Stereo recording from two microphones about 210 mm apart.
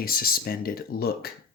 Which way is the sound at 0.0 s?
45° left (ahead or behind).